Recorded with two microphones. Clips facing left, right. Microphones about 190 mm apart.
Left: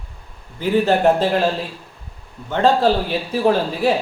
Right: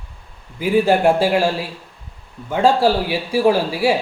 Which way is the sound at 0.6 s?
10° right (ahead or behind).